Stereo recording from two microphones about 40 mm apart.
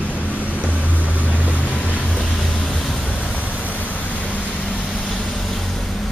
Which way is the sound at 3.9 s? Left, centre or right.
Left.